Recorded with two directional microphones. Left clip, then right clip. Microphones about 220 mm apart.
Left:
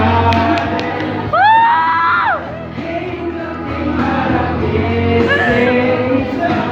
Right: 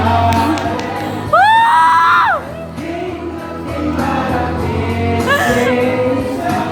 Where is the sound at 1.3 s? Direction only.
30° right (ahead or behind).